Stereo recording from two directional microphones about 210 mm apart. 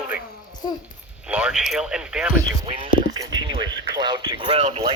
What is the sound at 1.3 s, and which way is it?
Speech, 5° right (ahead or behind).